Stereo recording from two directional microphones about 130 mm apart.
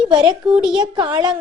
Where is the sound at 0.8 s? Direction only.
40° right (ahead or behind).